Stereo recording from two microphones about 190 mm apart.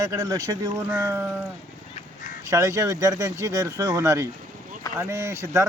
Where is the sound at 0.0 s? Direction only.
20° right (ahead or behind).